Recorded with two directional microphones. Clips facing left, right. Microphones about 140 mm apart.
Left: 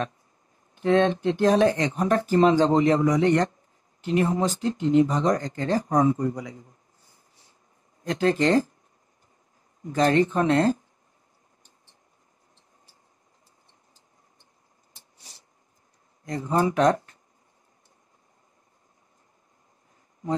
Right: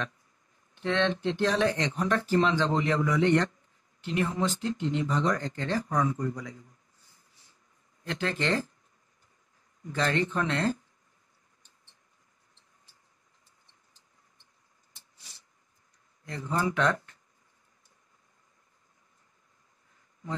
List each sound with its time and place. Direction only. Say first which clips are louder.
0.7 s speech: left 7 dB; 40° left (ahead or behind)
6.0 s a man's voice: left 7 dB; 30° left (ahead or behind)
8.0 s speech: left 9 dB; 35° left (ahead or behind)
9.8 s speech: left 8 dB; 35° left (ahead or behind)
15.0 s a sound: left 4 dB; 35° left (ahead or behind)
16.3 s speech: left 6 dB; 40° left (ahead or behind)